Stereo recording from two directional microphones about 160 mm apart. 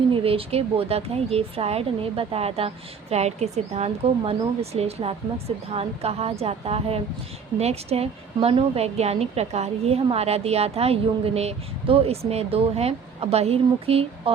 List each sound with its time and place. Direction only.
0.1 s speech: 35° right (ahead or behind)